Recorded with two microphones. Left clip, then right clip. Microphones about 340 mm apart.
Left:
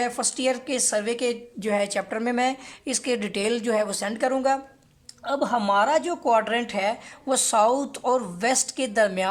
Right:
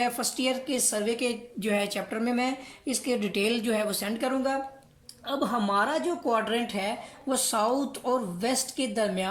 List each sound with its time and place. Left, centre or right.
0.0 s a woman's voice: left